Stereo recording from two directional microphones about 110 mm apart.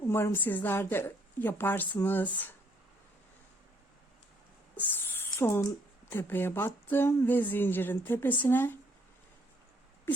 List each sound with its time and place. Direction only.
0.0 s a woman's voice: 20° left (ahead or behind)
4.9 s a sound: 20° left (ahead or behind)
6.1 s speech: 20° left (ahead or behind)